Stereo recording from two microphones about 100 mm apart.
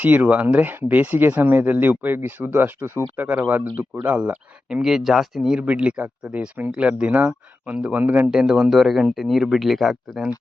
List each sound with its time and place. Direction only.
0.0 s speech: 15° right (ahead or behind); by 10.2 s centre (ahead or behind)